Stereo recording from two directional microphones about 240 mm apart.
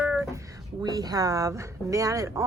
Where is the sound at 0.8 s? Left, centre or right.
Centre.